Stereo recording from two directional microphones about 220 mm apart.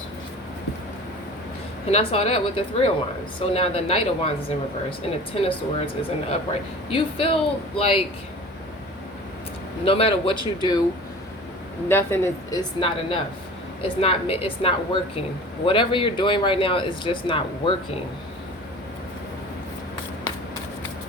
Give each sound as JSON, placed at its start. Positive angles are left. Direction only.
{"t": 1.9, "sound": "speech", "side_deg": 25}
{"t": 9.8, "sound": "speech", "side_deg": 25}
{"t": 11.9, "sound": "a woman's voice", "side_deg": 10}